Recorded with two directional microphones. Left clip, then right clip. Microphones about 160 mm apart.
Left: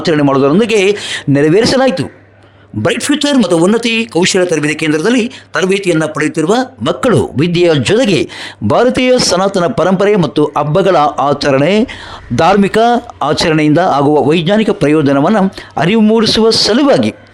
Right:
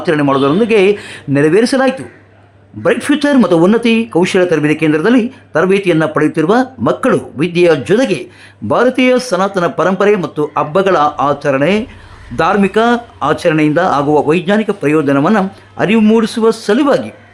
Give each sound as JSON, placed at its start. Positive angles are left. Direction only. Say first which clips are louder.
{"t": 0.0, "sound": "speech", "louder": "left 2 dB", "side_deg": 45}
{"t": 2.8, "sound": "a man's voice", "louder": "right 1 dB", "side_deg": 25}
{"t": 3.3, "sound": "speech", "louder": "right 1 dB", "side_deg": 0}
{"t": 3.8, "sound": "speech", "louder": "even", "side_deg": 50}